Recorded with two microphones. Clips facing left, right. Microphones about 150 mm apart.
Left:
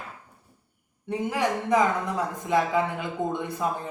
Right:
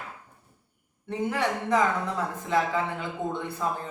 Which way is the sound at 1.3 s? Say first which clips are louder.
Left 2 dB; 15° left (ahead or behind).